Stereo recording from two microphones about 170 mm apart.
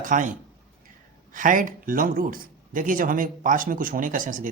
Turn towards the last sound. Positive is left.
turn(degrees=-50)  # may be behind; listen again after turning